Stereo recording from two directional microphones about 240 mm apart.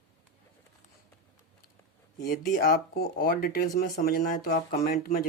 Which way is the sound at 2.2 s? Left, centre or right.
Left.